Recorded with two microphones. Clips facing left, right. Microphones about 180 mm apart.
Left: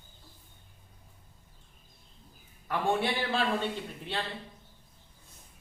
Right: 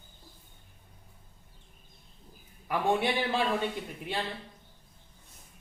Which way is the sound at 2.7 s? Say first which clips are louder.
Right 1 dB; 15° right (ahead or behind).